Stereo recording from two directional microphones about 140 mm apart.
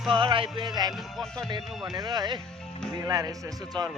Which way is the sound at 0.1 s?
35° right (ahead or behind).